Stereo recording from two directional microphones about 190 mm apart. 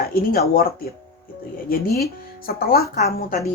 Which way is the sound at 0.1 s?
50° left (ahead or behind).